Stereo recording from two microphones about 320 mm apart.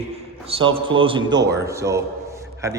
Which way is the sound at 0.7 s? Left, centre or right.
Centre.